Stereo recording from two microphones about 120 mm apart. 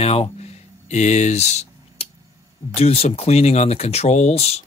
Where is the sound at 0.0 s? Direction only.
55° left (ahead or behind).